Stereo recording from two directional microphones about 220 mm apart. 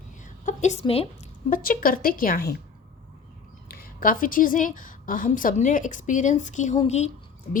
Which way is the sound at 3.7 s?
40° left (ahead or behind).